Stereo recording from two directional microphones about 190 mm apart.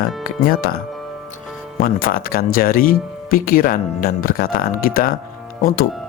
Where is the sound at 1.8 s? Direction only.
50° left (ahead or behind).